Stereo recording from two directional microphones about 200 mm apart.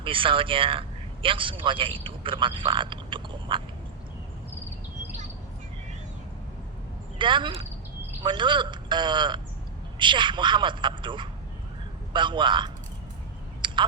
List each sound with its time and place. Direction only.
0.0 s a man's voice: 25° right (ahead or behind)
7.2 s speech: 25° right (ahead or behind)
13.6 s a sound: 25° right (ahead or behind)